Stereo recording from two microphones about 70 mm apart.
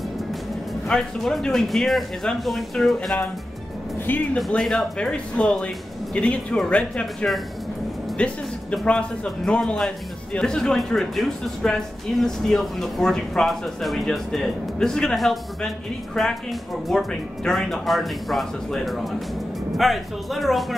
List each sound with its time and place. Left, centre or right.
0.8 s speech: centre
4.0 s speech: left
4.5 s speech: centre